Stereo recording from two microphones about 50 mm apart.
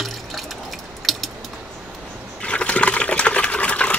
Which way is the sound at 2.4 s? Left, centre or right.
Left.